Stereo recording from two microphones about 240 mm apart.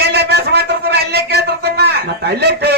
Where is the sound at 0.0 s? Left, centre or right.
Right.